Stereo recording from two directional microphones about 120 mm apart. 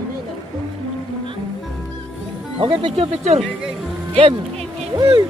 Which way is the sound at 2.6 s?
45° right (ahead or behind).